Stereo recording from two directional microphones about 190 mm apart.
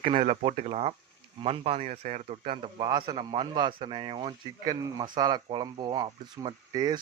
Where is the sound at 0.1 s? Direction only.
35° right (ahead or behind).